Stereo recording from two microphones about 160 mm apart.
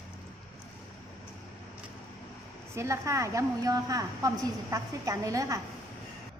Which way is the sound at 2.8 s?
20° right (ahead or behind).